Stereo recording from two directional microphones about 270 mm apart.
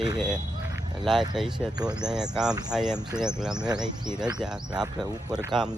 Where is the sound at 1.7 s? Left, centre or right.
Centre.